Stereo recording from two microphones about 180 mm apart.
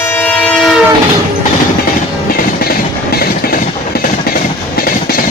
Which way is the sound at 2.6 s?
55° left (ahead or behind).